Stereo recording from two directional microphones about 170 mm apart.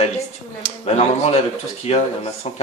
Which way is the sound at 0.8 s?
40° left (ahead or behind).